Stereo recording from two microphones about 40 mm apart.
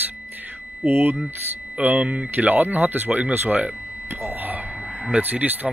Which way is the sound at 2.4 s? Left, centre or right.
Right.